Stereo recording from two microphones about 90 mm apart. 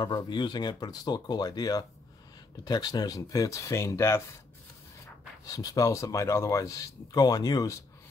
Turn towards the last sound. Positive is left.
turn(degrees=40)  # may be behind; listen again after turning